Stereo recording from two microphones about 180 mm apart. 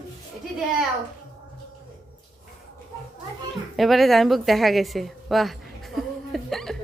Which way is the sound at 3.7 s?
Centre (ahead or behind).